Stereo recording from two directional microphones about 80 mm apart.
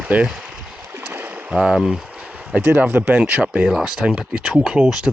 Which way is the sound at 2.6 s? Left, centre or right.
Right.